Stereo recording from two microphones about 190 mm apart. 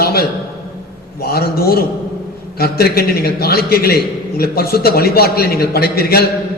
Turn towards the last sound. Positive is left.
turn(degrees=55)  # may be behind; listen again after turning